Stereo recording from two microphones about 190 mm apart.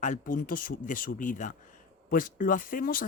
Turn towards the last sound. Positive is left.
turn(degrees=45)  # may be behind; listen again after turning